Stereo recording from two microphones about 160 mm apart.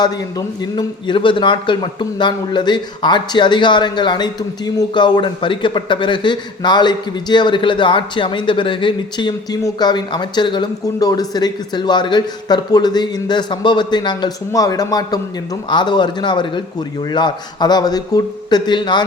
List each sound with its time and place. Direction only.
0.0 s a man's voice: 25° left (ahead or behind)